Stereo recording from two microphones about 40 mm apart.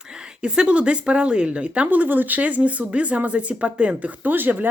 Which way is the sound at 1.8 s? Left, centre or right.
Right.